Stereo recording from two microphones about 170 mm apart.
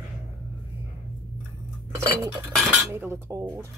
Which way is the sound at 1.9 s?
15° right (ahead or behind).